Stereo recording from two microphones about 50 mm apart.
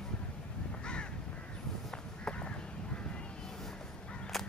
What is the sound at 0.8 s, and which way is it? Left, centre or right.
Crow, centre.